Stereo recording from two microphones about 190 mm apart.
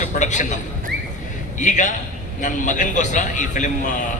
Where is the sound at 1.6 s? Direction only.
40° left (ahead or behind).